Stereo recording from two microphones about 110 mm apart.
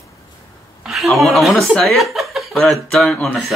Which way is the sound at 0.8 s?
Centre (ahead or behind).